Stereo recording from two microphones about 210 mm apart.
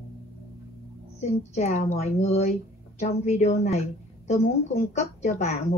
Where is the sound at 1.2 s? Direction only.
30° left (ahead or behind).